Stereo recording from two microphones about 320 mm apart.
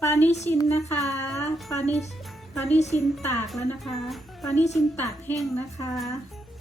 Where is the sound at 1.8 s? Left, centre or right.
Left.